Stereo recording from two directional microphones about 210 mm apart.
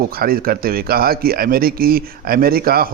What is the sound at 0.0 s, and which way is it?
Speech, 45° right (ahead or behind).